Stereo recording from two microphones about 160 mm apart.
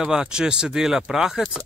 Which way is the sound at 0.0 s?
5° right (ahead or behind).